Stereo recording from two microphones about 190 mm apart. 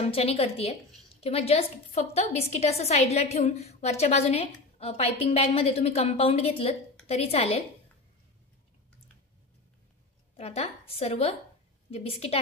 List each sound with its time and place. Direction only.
0.1 s a woman's voice: 30° left (ahead or behind)
10.3 s a woman's voice: 35° left (ahead or behind)